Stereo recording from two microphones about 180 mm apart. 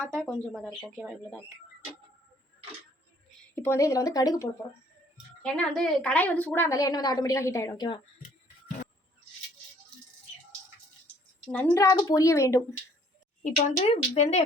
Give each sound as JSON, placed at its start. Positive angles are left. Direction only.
{"t": 0.0, "sound": "speech", "side_deg": -15}
{"t": 0.3, "sound": "speech", "side_deg": 0}
{"t": 3.5, "sound": "a woman's voice", "side_deg": 15}
{"t": 5.4, "sound": "a woman's voice", "side_deg": 5}
{"t": 11.4, "sound": "a woman's voice", "side_deg": 10}
{"t": 13.4, "sound": "speech", "side_deg": 45}